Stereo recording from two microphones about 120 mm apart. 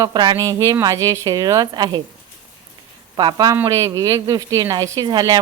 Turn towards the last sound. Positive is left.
turn(degrees=-35)  # may be behind; listen again after turning